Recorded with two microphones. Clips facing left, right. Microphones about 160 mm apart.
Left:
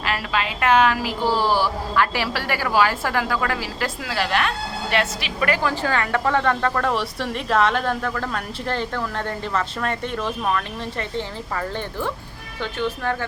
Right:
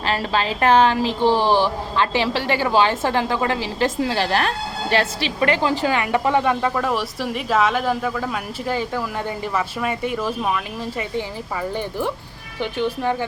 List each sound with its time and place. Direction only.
0.0 s speech: 30° right (ahead or behind)
5.6 s speech: 15° right (ahead or behind)
12.5 s speech: 15° right (ahead or behind)